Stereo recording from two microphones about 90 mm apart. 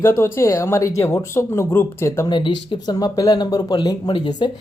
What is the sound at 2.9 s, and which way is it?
Speech, 45° left (ahead or behind).